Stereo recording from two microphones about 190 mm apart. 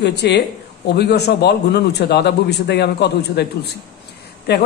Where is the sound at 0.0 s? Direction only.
60° left (ahead or behind).